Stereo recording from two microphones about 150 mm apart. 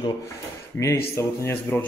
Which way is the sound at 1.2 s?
15° left (ahead or behind).